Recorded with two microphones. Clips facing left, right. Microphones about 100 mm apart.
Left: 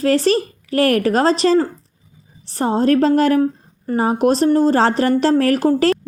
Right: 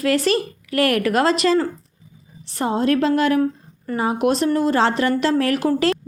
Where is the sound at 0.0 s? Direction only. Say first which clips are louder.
Left 3 dB; 35° left (ahead or behind).